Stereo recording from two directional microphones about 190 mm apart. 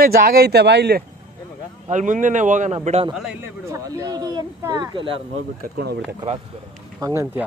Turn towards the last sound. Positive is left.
turn(degrees=-15)  # may be behind; listen again after turning